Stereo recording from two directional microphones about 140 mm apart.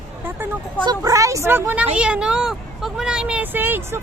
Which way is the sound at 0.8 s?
25° right (ahead or behind).